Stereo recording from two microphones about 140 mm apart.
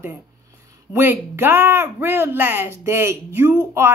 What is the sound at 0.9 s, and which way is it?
Speech, 15° right (ahead or behind).